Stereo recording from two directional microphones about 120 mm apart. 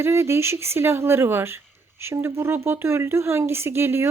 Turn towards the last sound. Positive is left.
turn(degrees=-20)  # may be behind; listen again after turning